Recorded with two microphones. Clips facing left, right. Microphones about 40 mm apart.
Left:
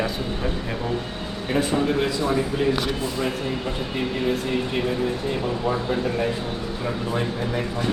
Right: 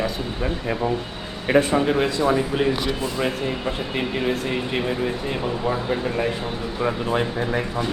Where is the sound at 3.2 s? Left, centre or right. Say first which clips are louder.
Right 1 dB; right.